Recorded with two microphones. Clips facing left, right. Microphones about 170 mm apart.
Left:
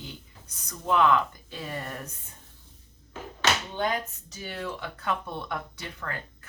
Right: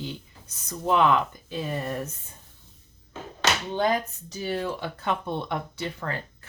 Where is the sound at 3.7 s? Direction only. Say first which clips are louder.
Right 4 dB; 35° right (ahead or behind).